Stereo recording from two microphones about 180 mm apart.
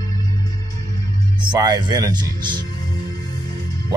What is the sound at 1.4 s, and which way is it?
Speech, 25° right (ahead or behind).